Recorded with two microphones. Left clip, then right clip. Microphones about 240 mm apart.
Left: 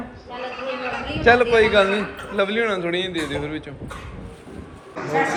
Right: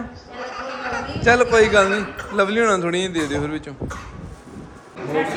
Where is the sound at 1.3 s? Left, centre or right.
Centre.